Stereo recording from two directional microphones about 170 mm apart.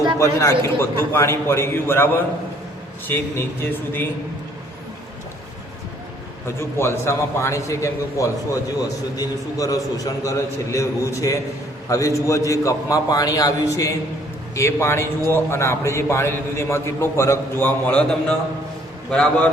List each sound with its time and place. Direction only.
0.2 s a man's voice: 20° left (ahead or behind)
3.1 s a man's voice: 15° left (ahead or behind)
6.6 s a man's voice: 15° left (ahead or behind)